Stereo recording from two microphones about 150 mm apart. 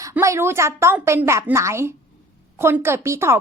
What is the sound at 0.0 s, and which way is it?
A woman's voice, 20° right (ahead or behind).